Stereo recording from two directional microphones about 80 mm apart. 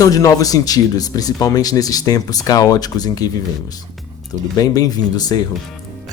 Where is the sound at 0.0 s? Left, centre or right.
Left.